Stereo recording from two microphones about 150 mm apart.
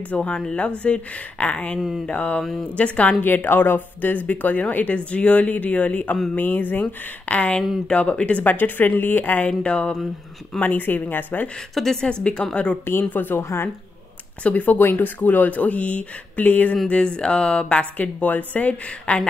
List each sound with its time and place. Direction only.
0.1 s a woman's voice: 10° left (ahead or behind)